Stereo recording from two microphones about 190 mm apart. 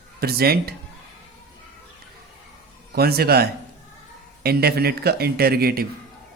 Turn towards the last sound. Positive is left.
turn(degrees=-55)  # may be behind; listen again after turning